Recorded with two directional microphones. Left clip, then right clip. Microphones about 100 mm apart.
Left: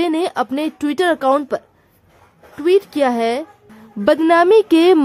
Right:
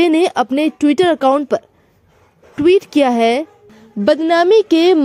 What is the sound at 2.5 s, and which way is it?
Speech, 50° right (ahead or behind).